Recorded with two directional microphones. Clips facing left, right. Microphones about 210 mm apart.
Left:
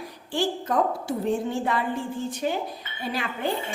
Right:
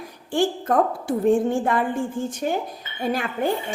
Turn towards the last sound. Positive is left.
turn(degrees=-45)  # may be behind; listen again after turning